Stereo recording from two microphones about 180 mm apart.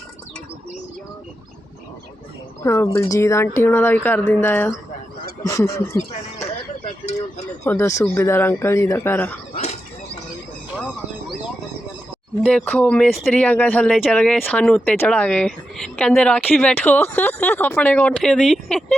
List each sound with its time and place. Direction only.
2.6 s speech: 15° left (ahead or behind)
7.0 s speech: 40° left (ahead or behind)
7.6 s speech: 15° left (ahead or behind)
12.4 s speech: 5° left (ahead or behind)